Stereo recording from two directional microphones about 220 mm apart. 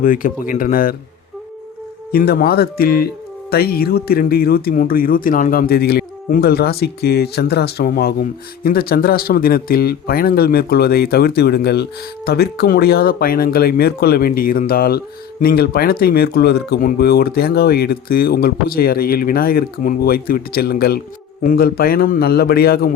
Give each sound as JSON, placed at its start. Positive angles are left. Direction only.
{"t": 0.0, "sound": "speech", "side_deg": 35}
{"t": 2.1, "sound": "speech", "side_deg": 45}